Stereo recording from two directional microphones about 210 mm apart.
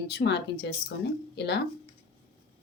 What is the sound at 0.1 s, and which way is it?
Speech, 50° left (ahead or behind).